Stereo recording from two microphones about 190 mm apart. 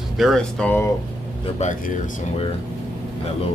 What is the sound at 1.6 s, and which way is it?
Speech, 40° left (ahead or behind).